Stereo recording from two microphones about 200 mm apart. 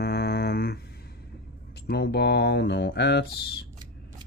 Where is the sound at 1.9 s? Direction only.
55° left (ahead or behind).